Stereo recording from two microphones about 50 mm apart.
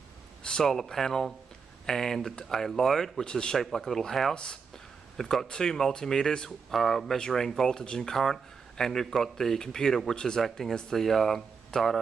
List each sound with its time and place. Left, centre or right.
0.4 s speech: centre
3.3 s speech: centre
7.2 s speech: centre